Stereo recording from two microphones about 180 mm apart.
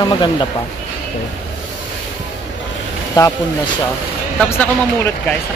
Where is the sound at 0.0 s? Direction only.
25° left (ahead or behind).